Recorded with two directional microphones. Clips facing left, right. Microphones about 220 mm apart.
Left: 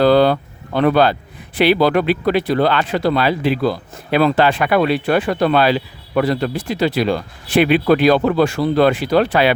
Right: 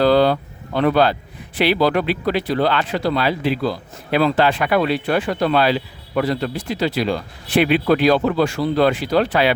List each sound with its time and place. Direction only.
0.0 s vehicle: 55° left (ahead or behind)
1.5 s speech: 55° left (ahead or behind)